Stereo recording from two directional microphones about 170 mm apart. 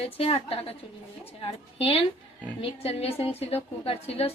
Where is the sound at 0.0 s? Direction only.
35° left (ahead or behind).